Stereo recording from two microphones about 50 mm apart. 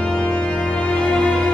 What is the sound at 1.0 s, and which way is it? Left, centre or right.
Music, left.